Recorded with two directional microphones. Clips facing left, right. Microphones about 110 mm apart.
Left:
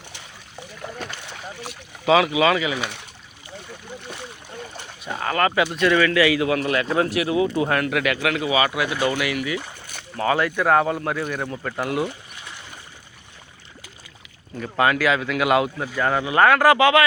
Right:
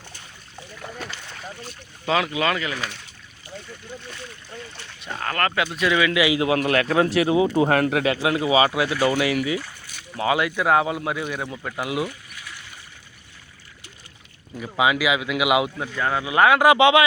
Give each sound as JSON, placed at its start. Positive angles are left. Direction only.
{"t": 0.8, "sound": "boat", "side_deg": 0}
{"t": 2.0, "sound": "speech", "side_deg": 10}
{"t": 5.0, "sound": "speech", "side_deg": 5}
{"t": 5.7, "sound": "a man's voice", "side_deg": -5}
{"t": 10.2, "sound": "a man's voice", "side_deg": -15}
{"t": 12.0, "sound": "a sound", "side_deg": 25}
{"t": 14.6, "sound": "a man's voice", "side_deg": -10}
{"t": 15.7, "sound": "speech", "side_deg": 5}
{"t": 16.2, "sound": "a man's voice", "side_deg": -15}